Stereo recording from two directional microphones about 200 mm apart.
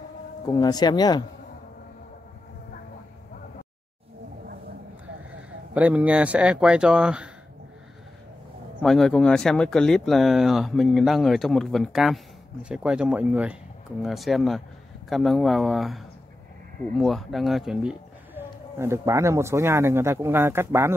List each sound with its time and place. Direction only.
0.5 s speech: 20° left (ahead or behind)
5.8 s speech: 5° right (ahead or behind)
8.8 s speech: centre (ahead or behind)
17.0 s speech: centre (ahead or behind)